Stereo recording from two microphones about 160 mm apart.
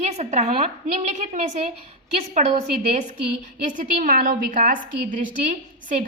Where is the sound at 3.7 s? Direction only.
55° right (ahead or behind).